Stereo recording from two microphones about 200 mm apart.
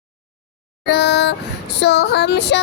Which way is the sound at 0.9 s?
55° left (ahead or behind).